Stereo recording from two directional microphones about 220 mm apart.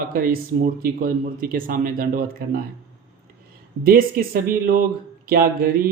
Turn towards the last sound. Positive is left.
turn(degrees=-40)  # may be behind; listen again after turning